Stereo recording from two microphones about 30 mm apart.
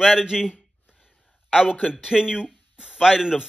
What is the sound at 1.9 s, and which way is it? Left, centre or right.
Speech, right.